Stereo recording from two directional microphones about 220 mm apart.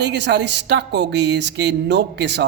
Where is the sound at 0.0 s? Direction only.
50° right (ahead or behind).